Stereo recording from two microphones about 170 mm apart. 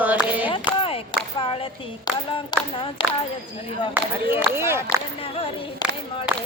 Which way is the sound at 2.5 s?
25° left (ahead or behind).